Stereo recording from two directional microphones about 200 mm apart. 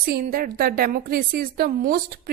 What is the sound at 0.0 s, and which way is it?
A woman's voice, 50° right (ahead or behind).